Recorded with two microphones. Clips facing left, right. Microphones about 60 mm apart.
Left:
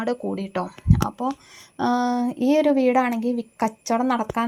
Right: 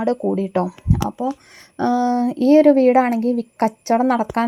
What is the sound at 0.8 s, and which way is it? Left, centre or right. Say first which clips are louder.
A woman's voice: right 2 dB; right.